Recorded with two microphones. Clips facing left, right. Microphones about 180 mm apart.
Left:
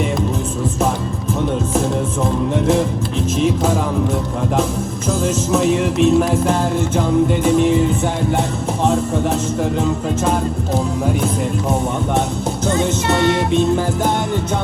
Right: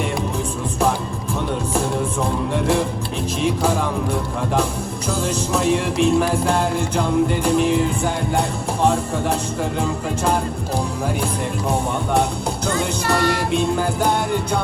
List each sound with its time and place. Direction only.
3.4 s music: 5° left (ahead or behind)
5.2 s music: 5° left (ahead or behind)
12.6 s music: 20° left (ahead or behind)
13.5 s music: centre (ahead or behind)